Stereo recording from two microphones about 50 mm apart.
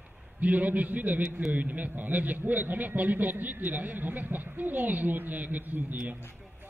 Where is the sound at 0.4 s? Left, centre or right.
Right.